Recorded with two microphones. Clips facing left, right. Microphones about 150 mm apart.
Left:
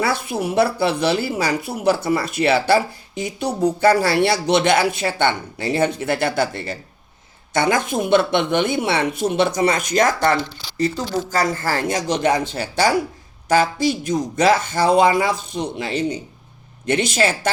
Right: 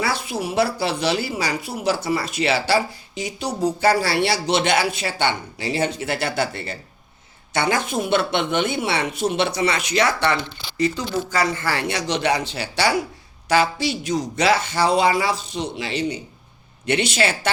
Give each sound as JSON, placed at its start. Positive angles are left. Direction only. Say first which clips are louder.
{"t": 0.0, "sound": "speech", "louder": "left 3 dB", "side_deg": 55}